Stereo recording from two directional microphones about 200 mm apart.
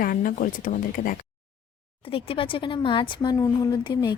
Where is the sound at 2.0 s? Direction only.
25° left (ahead or behind).